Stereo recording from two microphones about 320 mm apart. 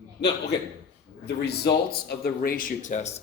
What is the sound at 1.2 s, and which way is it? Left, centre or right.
Speech, left.